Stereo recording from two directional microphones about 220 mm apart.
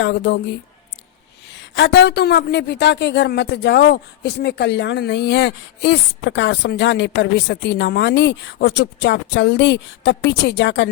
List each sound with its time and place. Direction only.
0.0 s a woman's voice: 50° left (ahead or behind)
1.5 s a woman's voice: 55° left (ahead or behind)